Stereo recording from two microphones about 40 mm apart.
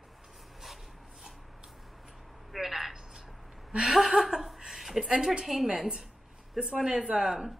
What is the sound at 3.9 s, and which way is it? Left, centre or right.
Chuckle, centre.